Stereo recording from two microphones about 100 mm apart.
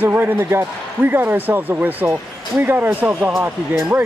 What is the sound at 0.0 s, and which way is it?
Speech, 20° right (ahead or behind).